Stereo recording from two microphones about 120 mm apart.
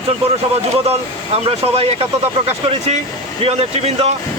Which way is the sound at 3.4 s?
60° right (ahead or behind).